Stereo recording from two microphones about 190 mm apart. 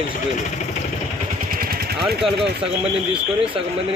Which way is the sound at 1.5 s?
50° right (ahead or behind).